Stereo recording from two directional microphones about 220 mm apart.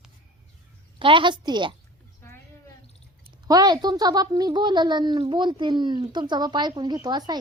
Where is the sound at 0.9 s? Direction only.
20° right (ahead or behind).